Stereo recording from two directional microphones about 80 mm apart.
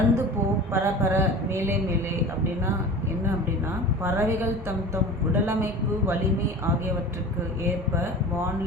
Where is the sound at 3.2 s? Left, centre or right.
Right.